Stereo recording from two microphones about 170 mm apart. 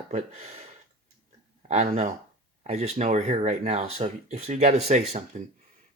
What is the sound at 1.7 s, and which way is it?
Speech, 40° right (ahead or behind).